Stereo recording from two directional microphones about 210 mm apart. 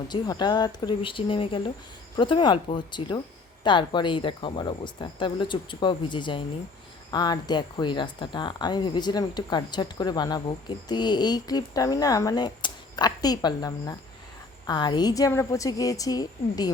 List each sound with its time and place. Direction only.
0.1 s a woman's voice: 20° left (ahead or behind)